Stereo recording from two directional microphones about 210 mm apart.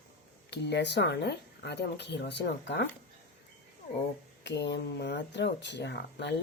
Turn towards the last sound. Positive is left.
turn(degrees=55)  # may be behind; listen again after turning